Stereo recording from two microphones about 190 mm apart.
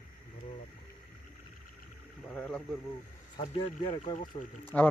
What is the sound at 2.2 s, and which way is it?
Speech, 5° left (ahead or behind).